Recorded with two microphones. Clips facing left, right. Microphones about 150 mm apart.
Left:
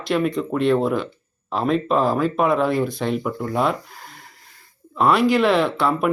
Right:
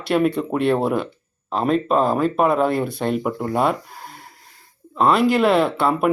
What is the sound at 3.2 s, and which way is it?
Speech, 50° right (ahead or behind).